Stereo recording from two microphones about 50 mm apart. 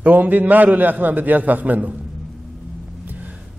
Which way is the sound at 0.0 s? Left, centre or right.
Right.